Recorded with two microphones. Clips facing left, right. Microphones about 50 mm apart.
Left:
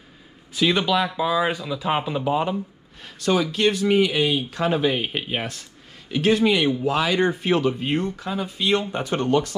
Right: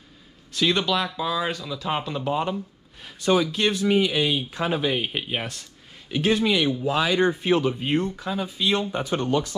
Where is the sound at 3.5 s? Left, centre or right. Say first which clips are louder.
Left 2 dB; left.